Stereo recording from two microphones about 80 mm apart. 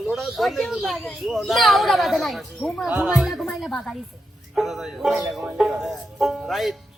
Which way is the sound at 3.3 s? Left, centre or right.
Centre.